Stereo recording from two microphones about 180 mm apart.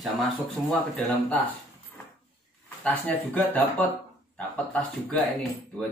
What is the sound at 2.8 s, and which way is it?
Speech, 10° left (ahead or behind).